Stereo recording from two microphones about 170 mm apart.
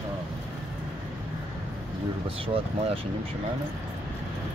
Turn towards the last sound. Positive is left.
turn(degrees=-35)  # may be behind; listen again after turning